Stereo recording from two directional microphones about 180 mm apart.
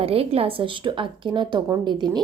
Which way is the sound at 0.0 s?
30° right (ahead or behind).